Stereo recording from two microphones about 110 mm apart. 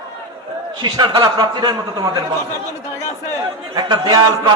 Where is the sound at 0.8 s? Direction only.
45° right (ahead or behind).